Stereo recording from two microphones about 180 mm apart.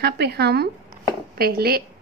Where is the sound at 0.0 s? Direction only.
65° right (ahead or behind).